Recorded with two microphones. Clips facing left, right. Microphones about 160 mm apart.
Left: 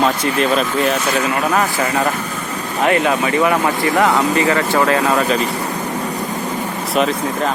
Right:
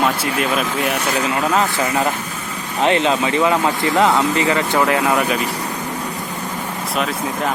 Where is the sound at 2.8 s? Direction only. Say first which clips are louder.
Left 1 dB; 25° right (ahead or behind).